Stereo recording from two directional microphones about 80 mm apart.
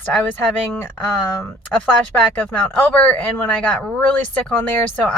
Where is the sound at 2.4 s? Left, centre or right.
Centre.